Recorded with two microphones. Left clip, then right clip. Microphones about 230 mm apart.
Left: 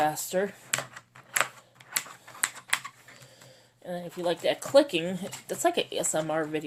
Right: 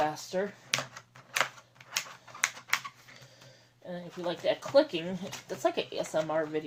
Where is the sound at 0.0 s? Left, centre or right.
Left.